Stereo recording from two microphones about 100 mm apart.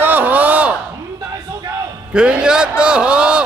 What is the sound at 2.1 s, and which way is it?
A man's voice, 10° right (ahead or behind).